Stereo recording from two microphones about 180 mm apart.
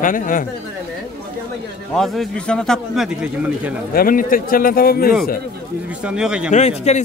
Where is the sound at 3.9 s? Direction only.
50° left (ahead or behind).